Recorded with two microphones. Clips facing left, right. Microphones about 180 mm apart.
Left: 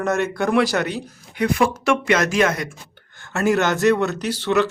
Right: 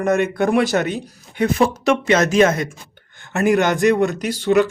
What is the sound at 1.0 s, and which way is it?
Speech, 30° right (ahead or behind).